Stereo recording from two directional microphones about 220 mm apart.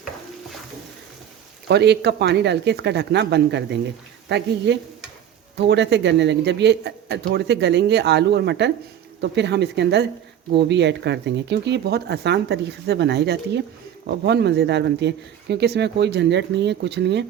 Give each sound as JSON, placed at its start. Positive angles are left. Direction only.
{"t": 1.6, "sound": "speech", "side_deg": -50}